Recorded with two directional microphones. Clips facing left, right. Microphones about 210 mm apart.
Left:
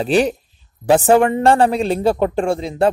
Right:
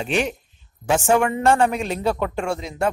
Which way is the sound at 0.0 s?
35° left (ahead or behind).